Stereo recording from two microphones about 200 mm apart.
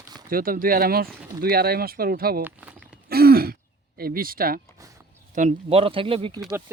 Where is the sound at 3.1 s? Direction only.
50° right (ahead or behind).